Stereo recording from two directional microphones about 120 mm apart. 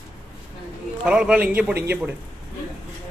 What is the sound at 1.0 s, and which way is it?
A man's voice, 5° right (ahead or behind).